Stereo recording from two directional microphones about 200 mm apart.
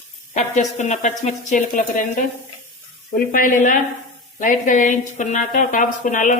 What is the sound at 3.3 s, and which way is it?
A woman's voice, 40° left (ahead or behind).